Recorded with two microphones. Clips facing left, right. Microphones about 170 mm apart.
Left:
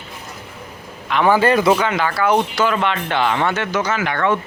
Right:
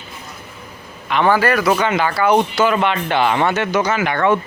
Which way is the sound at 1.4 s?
25° left (ahead or behind).